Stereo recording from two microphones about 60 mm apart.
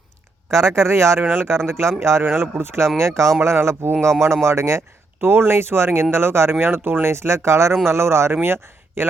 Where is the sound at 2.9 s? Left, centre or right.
Right.